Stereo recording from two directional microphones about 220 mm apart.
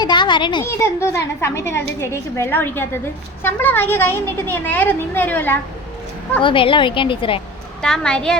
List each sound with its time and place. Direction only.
0.0 s a woman's voice: 20° left (ahead or behind)
6.4 s a woman's voice: 25° left (ahead or behind)
7.8 s a woman's voice: 5° left (ahead or behind)